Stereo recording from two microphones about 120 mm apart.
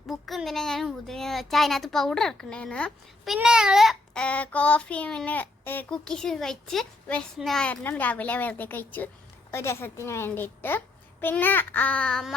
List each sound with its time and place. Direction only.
0.1 s a child's voice: centre (ahead or behind)
3.3 s a child's voice: 5° right (ahead or behind); by 6.0 s 15° left (ahead or behind)
6.1 s a child's voice: 5° left (ahead or behind)